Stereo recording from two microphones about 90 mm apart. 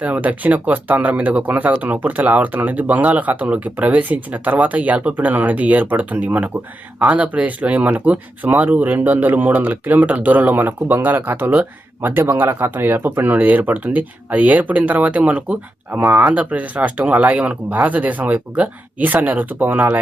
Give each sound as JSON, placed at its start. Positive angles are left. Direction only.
{"t": 0.0, "sound": "speech", "side_deg": -15}